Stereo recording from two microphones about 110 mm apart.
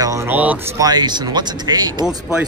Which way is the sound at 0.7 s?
40° right (ahead or behind).